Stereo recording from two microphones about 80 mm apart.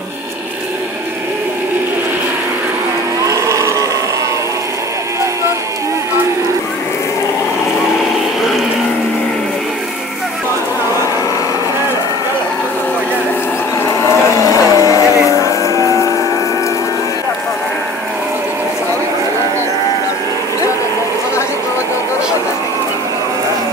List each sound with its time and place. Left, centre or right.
3.3 s moo: right
14.0 s vehicle: left